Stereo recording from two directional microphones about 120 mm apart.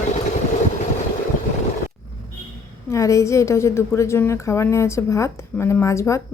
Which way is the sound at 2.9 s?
25° left (ahead or behind).